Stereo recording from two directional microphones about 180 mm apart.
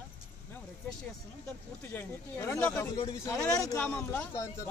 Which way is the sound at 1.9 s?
15° left (ahead or behind).